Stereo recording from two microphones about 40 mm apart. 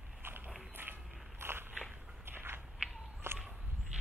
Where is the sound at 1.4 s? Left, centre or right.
Right.